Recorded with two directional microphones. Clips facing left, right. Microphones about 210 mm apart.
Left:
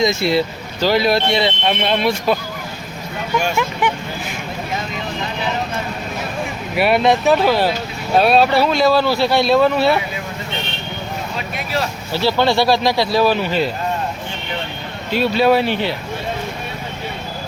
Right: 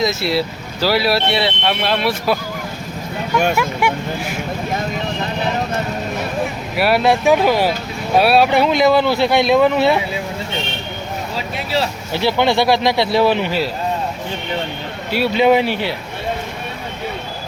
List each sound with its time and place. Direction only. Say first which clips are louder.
0.0 s speech: left 2 dB; 5° right (ahead or behind)
3.5 s speech: right 1 dB; 10° right (ahead or behind)
6.7 s speech: even; centre (ahead or behind); by 10.0 s 20° right (ahead or behind)
12.1 s speech: even; 20° right (ahead or behind)
15.1 s speech: right 1 dB; 15° right (ahead or behind)